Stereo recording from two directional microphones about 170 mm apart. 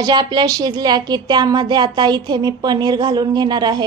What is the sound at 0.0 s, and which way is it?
A woman's voice, 25° right (ahead or behind).